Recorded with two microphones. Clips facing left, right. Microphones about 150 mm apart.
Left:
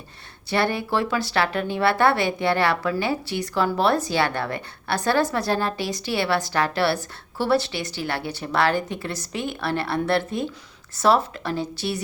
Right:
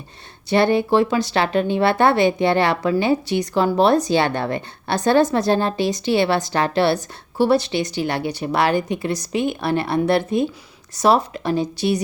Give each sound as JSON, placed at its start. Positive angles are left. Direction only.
{"t": 0.5, "sound": "speech", "side_deg": -20}